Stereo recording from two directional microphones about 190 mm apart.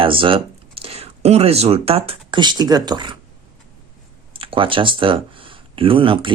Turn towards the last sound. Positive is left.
turn(degrees=-25)  # may be behind; listen again after turning